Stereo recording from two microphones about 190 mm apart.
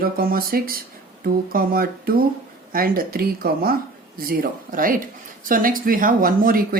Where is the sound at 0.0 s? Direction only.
50° right (ahead or behind).